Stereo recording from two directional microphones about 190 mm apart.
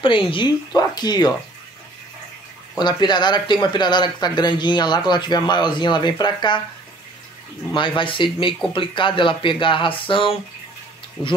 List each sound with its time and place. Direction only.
0.0 s speech: 25° left (ahead or behind)
2.8 s speech: 25° left (ahead or behind)
7.7 s speech: 25° left (ahead or behind)